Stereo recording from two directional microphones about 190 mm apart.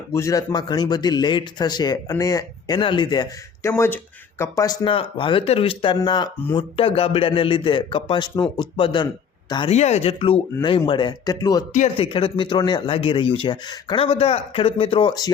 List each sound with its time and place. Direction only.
0.1 s a man's voice: 15° left (ahead or behind)
9.7 s a man's voice: 35° left (ahead or behind); by 11.6 s 20° left (ahead or behind)
11.7 s speech: 40° left (ahead or behind)
12.0 s a man's voice: 25° left (ahead or behind)